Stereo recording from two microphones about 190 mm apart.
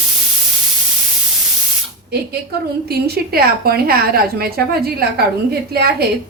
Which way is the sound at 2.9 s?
55° right (ahead or behind).